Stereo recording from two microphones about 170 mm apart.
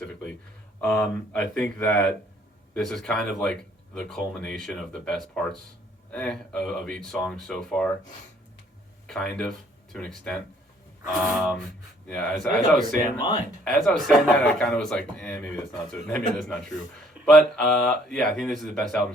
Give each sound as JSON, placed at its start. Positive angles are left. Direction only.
{"t": 0.8, "sound": "speech", "side_deg": 5}
{"t": 9.0, "sound": "speech", "side_deg": 5}
{"t": 13.1, "sound": "speech", "side_deg": 25}
{"t": 13.7, "sound": "speech", "side_deg": 5}